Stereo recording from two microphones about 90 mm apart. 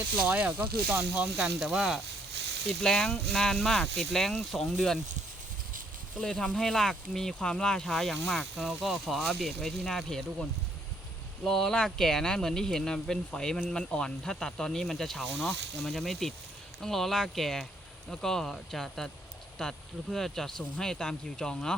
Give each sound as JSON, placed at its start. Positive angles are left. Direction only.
{"t": 0.3, "sound": "speech", "side_deg": -20}
{"t": 1.5, "sound": "speech", "side_deg": -5}
{"t": 2.8, "sound": "speech", "side_deg": 5}
{"t": 6.1, "sound": "speech", "side_deg": 5}
{"t": 11.4, "sound": "speech", "side_deg": 5}